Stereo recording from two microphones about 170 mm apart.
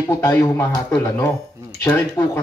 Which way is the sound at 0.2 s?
20° left (ahead or behind).